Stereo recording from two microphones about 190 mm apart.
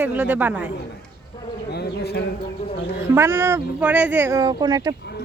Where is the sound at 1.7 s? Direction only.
60° left (ahead or behind).